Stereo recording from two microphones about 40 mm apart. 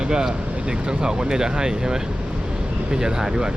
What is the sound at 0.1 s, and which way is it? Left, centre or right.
Speech, centre.